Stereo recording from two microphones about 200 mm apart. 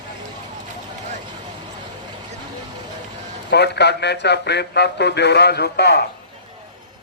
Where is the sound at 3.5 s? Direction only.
60° left (ahead or behind).